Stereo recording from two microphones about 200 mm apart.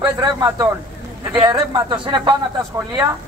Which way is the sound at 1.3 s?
20° right (ahead or behind).